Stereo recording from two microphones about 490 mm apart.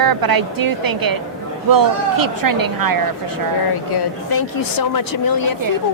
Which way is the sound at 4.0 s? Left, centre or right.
Left.